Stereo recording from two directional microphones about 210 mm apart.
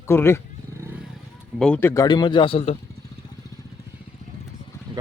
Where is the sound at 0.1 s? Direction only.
10° left (ahead or behind).